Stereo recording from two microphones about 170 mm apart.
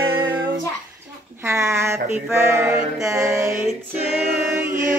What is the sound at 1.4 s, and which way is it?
Mantra, 15° right (ahead or behind).